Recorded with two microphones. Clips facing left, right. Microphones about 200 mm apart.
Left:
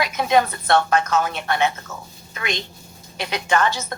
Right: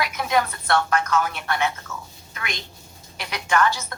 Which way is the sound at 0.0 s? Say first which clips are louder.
Left 4 dB; 20° left (ahead or behind).